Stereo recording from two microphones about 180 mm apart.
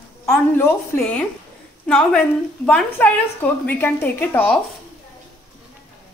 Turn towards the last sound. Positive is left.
turn(degrees=10)  # may be behind; listen again after turning